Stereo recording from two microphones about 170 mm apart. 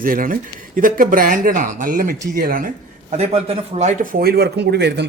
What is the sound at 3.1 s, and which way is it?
A man's voice, 40° right (ahead or behind).